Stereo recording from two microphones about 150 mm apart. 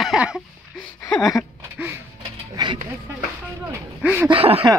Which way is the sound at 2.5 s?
30° right (ahead or behind).